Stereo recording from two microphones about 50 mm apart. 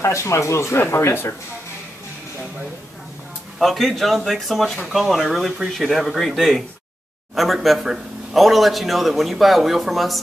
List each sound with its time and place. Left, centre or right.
0.0 s a man's voice: left
3.5 s a man's voice: centre